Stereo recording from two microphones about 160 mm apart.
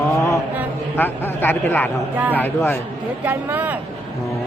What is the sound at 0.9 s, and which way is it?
Speech, 10° left (ahead or behind).